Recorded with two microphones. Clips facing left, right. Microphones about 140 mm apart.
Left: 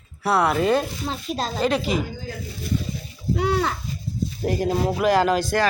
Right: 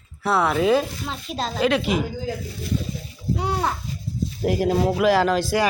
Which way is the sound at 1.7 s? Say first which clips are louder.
Right 1 dB; centre (ahead or behind).